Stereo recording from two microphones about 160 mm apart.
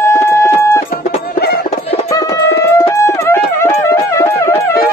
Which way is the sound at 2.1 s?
20° left (ahead or behind).